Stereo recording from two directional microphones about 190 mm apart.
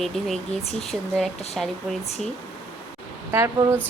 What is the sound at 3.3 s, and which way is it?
Speech, 15° right (ahead or behind).